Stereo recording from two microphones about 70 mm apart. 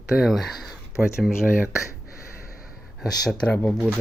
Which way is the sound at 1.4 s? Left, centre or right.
Right.